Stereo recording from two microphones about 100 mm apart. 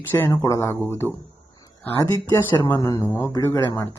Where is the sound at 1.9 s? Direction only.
35° left (ahead or behind).